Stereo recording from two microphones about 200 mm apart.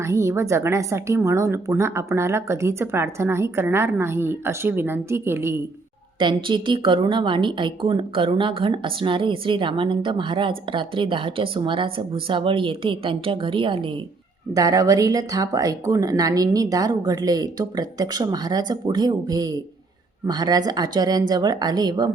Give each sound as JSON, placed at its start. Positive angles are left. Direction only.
{"t": 0.0, "sound": "a woman's voice", "side_deg": -15}
{"t": 6.1, "sound": "a woman's voice", "side_deg": -25}